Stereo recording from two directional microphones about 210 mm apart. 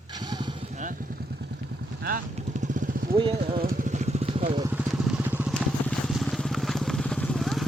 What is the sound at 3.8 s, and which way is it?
Vehicle, 35° right (ahead or behind).